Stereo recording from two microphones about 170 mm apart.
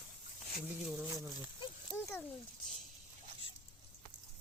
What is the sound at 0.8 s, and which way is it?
Speech, 5° right (ahead or behind).